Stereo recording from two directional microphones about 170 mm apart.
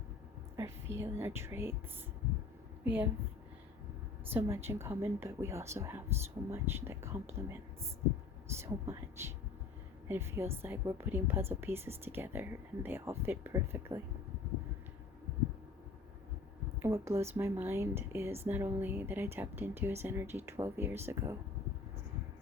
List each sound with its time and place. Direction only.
0.5 s speech: 15° right (ahead or behind)
2.8 s speech: 10° right (ahead or behind)
4.3 s speech: 15° right (ahead or behind)
16.8 s speech: 15° right (ahead or behind)